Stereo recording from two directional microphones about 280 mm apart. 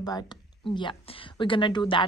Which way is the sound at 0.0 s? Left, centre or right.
Centre.